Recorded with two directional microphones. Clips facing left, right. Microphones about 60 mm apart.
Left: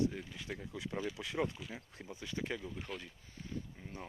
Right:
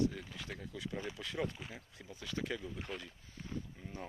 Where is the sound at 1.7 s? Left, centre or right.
Left.